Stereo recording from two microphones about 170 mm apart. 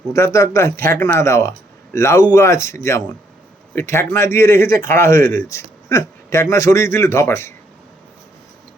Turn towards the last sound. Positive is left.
turn(degrees=15)  # may be behind; listen again after turning